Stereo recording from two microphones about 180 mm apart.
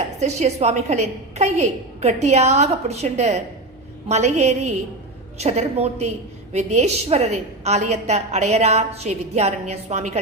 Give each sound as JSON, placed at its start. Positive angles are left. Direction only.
{"t": 0.2, "sound": "a woman's voice", "side_deg": -40}